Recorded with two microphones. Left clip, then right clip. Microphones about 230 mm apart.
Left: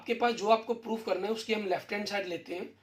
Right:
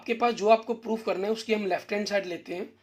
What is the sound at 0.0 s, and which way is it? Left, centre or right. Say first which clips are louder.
Speech: right 4 dB; right.